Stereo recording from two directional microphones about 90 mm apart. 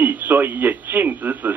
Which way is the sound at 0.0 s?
20° right (ahead or behind).